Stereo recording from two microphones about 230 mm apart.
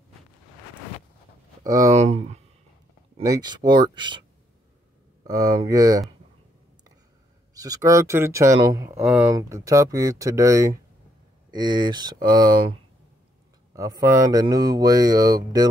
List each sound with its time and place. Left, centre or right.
1.9 s speech: right
3.2 s speech: centre
5.2 s speech: centre
7.5 s speech: centre
13.7 s speech: centre